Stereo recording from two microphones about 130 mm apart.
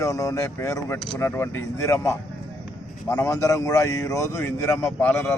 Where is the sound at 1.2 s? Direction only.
20° left (ahead or behind).